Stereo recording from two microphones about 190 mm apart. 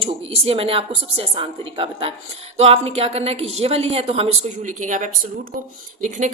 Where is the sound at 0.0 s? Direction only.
30° right (ahead or behind).